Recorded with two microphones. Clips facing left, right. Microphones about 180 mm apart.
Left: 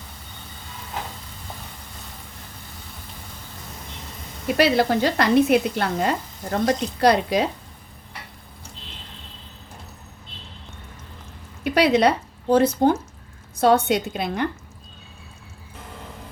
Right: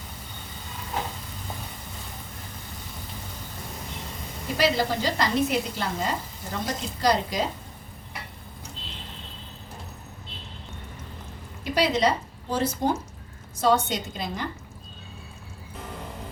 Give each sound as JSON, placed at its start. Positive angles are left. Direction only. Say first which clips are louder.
{"t": 4.5, "sound": "speech", "louder": "left 5 dB", "side_deg": 65}
{"t": 11.6, "sound": "a woman's voice", "louder": "left 5 dB", "side_deg": 65}